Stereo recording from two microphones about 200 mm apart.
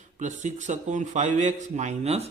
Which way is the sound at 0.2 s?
35° right (ahead or behind).